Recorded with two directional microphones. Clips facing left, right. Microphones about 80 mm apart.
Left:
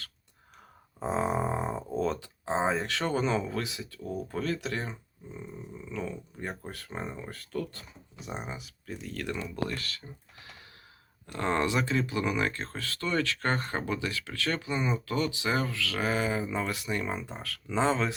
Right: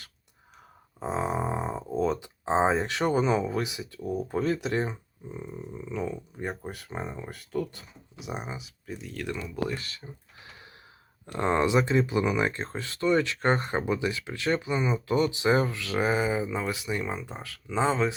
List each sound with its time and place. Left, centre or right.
0.9 s a sound: centre
2.5 s speech: right
2.8 s speech: centre
7.0 s speech: centre
9.6 s speech: centre
11.3 s speech: centre
14.8 s speech: centre
15.2 s speech: right; by 18.1 s centre